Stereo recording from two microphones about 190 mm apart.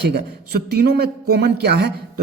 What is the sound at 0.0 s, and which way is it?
A man's voice, 60° right (ahead or behind).